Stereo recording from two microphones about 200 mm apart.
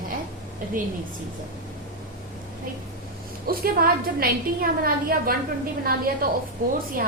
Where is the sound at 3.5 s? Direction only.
50° right (ahead or behind).